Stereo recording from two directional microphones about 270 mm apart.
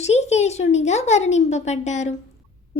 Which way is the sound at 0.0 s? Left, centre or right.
Left.